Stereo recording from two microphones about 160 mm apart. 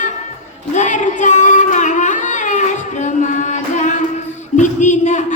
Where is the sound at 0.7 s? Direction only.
50° left (ahead or behind).